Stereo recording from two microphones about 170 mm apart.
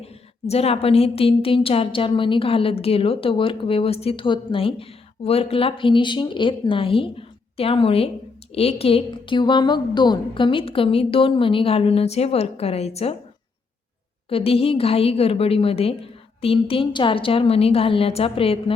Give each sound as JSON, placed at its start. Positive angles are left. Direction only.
{"t": 0.0, "sound": "a woman's voice", "side_deg": 35}
{"t": 14.3, "sound": "a woman's voice", "side_deg": 35}